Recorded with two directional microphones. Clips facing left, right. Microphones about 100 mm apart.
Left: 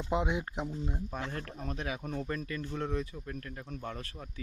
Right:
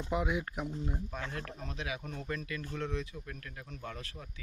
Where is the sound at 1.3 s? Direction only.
35° left (ahead or behind).